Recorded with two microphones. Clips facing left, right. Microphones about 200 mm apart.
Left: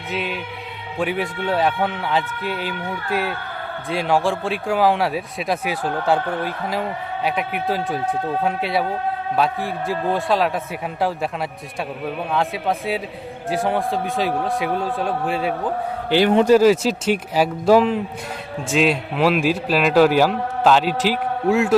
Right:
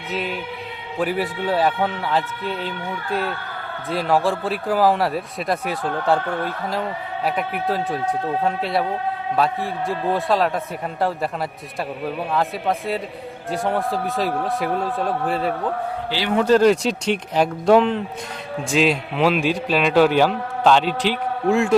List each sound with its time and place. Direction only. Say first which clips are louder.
0.1 s a man's voice: even; centre (ahead or behind)
11.8 s a man's voice: even; centre (ahead or behind)
16.0 s a man's voice: left 13 dB; 55° left (ahead or behind)
16.5 s a man's voice: left 2 dB; 5° left (ahead or behind)